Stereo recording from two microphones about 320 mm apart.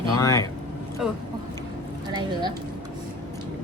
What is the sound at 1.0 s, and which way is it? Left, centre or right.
Speech, centre.